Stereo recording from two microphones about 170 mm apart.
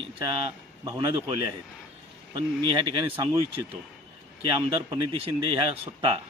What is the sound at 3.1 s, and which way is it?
Speech, 10° right (ahead or behind).